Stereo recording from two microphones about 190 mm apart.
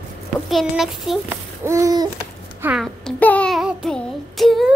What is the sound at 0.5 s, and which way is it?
Speech, centre (ahead or behind).